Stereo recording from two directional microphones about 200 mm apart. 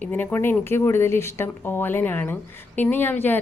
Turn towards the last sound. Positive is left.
turn(degrees=10)  # may be behind; listen again after turning